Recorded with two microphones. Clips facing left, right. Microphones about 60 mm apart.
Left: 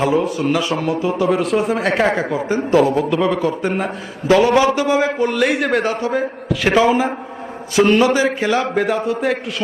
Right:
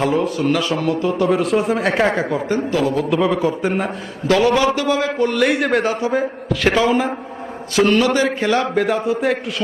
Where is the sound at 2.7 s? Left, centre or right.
Left.